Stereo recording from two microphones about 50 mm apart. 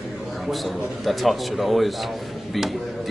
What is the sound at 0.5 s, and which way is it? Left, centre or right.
A man's voice, centre.